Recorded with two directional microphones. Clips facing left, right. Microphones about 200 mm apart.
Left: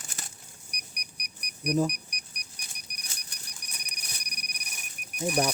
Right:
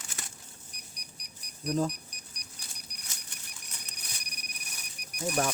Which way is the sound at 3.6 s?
20° left (ahead or behind).